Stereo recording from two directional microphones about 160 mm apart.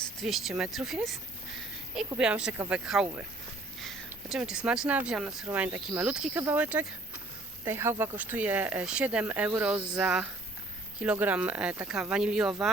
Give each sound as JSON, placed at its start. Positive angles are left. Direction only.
{"t": 0.2, "sound": "speech", "side_deg": 0}